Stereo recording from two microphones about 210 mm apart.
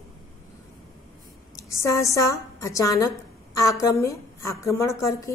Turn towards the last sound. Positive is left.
turn(degrees=15)  # may be behind; listen again after turning